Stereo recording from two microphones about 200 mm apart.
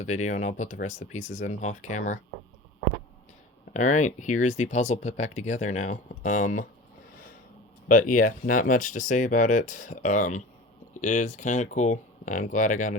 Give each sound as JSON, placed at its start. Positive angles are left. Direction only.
{"t": 0.0, "sound": "speech", "side_deg": 35}
{"t": 3.7, "sound": "speech", "side_deg": 40}
{"t": 7.9, "sound": "speech", "side_deg": 40}